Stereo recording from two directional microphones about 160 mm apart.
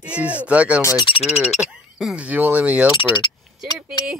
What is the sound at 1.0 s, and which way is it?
Speech, 40° left (ahead or behind).